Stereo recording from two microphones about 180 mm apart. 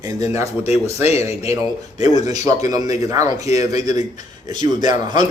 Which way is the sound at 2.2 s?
20° right (ahead or behind).